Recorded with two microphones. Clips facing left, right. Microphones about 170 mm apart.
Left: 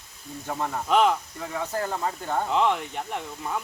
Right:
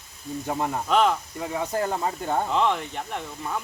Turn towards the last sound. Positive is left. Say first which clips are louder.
# even
turn(degrees=5)  # may be behind; listen again after turning